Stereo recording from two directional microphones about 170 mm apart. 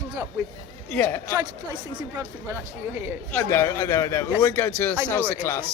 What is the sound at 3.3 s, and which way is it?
Speech, 15° left (ahead or behind).